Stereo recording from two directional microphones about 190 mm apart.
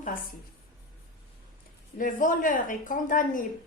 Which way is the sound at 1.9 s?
45° left (ahead or behind).